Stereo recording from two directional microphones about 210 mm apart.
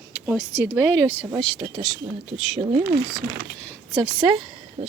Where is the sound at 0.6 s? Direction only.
10° right (ahead or behind).